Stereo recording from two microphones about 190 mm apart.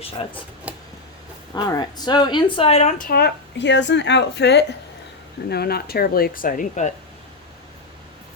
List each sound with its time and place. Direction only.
0.7 s a sound: 10° right (ahead or behind)
1.5 s speech: 20° left (ahead or behind); by 3.1 s 35° left (ahead or behind)
3.1 s a woman's voice: 55° left (ahead or behind)